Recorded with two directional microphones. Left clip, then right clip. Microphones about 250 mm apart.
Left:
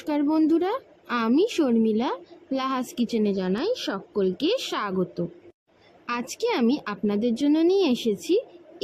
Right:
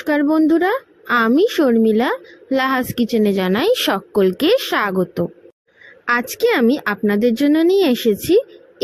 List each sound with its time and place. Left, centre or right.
0.0 s speech: right